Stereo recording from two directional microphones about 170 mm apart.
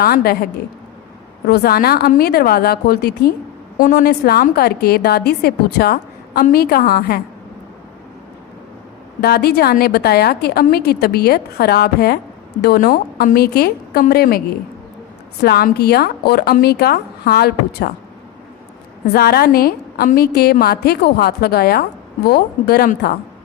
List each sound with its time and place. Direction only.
0.0 s a woman's voice: 65° left (ahead or behind)
1.5 s a woman's voice: 65° left (ahead or behind)
3.8 s a woman's voice: 55° left (ahead or behind)
9.2 s a woman's voice: 65° left (ahead or behind)
19.1 s a woman's voice: 65° left (ahead or behind)